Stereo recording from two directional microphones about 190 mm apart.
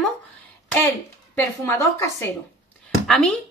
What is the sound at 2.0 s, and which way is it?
Speech, 15° left (ahead or behind).